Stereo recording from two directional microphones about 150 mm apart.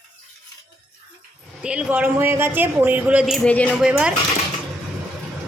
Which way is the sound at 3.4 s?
10° left (ahead or behind).